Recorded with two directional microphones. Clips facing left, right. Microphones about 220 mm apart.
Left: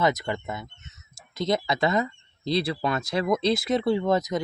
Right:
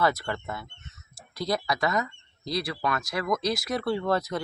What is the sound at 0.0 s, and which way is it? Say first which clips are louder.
Speech: left 2 dB; 20° left (ahead or behind).